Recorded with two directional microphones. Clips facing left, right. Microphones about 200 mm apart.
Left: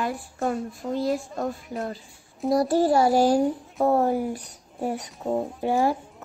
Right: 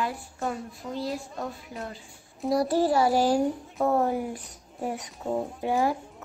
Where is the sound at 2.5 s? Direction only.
45° left (ahead or behind).